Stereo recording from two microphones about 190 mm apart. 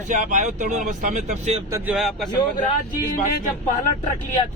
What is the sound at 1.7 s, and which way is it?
Speech, 15° right (ahead or behind).